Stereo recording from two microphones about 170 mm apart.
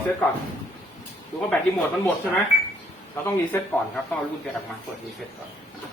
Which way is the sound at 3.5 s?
15° left (ahead or behind).